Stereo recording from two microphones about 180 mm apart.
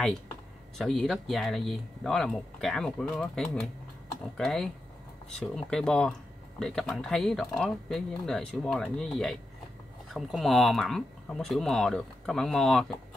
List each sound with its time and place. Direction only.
0.7 s speech: centre (ahead or behind)